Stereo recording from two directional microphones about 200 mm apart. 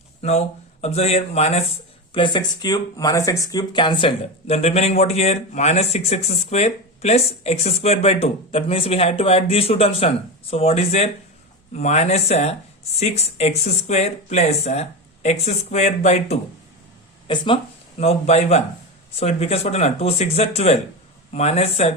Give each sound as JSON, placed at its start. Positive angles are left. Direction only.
{"t": 0.2, "sound": "speech", "side_deg": 35}